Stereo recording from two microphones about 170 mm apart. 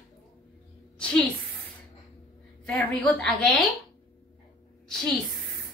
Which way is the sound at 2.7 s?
5° left (ahead or behind).